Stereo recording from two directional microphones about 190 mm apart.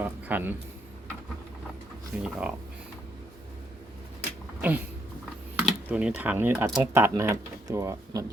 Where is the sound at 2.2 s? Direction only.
5° right (ahead or behind).